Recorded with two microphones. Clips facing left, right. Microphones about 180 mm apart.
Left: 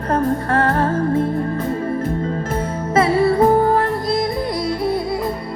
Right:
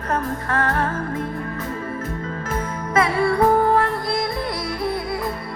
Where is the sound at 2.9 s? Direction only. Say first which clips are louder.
Left 4 dB; 30° left (ahead or behind).